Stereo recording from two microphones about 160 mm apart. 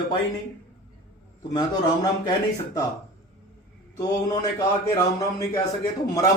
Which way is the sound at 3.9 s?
25° left (ahead or behind).